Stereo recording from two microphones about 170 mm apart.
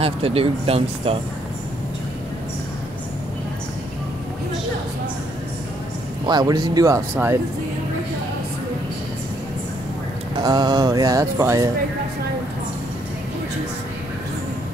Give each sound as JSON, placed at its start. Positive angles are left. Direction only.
{"t": 0.0, "sound": "speech", "side_deg": -35}
{"t": 6.2, "sound": "speech", "side_deg": -25}
{"t": 10.3, "sound": "speech", "side_deg": -25}